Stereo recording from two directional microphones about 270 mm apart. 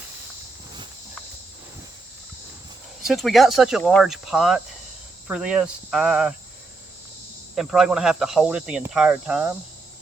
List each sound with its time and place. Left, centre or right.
3.0 s speech: centre
7.5 s speech: centre